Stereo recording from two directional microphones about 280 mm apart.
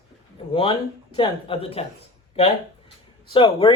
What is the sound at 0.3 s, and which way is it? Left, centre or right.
Speech, centre.